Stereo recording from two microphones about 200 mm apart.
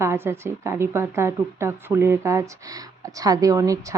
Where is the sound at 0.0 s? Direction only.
10° right (ahead or behind).